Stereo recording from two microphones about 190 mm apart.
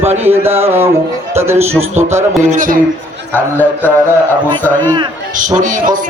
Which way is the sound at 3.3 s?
10° left (ahead or behind).